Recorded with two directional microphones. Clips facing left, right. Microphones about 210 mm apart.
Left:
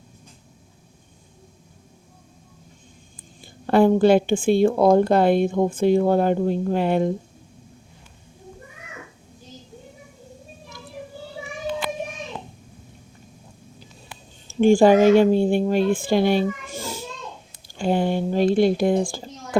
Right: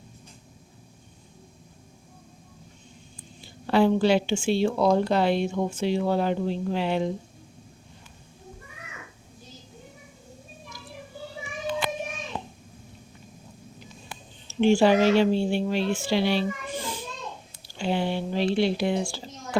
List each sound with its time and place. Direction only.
3.4 s speech: 50° left (ahead or behind)
14.4 s speech: 50° left (ahead or behind)